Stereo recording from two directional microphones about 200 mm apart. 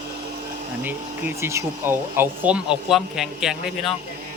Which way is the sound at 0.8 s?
10° right (ahead or behind).